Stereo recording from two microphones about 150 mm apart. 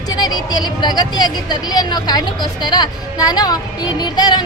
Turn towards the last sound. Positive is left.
turn(degrees=30)  # may be behind; listen again after turning